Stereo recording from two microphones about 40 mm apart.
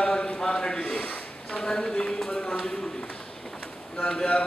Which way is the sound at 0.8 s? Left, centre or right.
Left.